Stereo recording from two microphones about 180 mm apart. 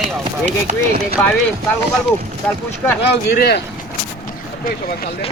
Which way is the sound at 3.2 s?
60° left (ahead or behind).